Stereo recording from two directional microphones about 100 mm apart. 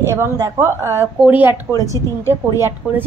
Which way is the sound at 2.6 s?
20° right (ahead or behind).